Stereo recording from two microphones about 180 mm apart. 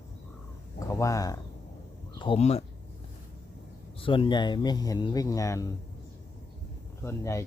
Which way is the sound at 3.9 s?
30° left (ahead or behind).